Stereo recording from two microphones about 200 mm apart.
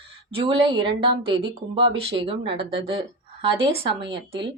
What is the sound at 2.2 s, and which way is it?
A woman's voice, 25° right (ahead or behind).